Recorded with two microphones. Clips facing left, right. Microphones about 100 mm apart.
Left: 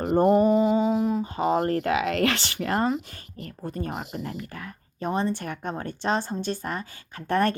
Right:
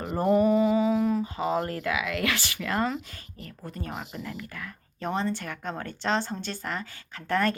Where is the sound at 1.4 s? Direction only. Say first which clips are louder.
Left 5 dB; 45° left (ahead or behind).